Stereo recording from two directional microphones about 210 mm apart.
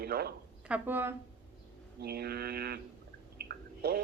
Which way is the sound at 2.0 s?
50° right (ahead or behind).